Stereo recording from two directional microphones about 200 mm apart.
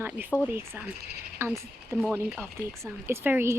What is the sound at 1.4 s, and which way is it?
Speech, 10° right (ahead or behind).